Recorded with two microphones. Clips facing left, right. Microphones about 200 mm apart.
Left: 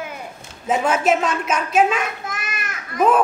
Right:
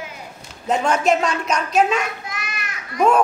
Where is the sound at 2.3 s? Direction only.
50° left (ahead or behind).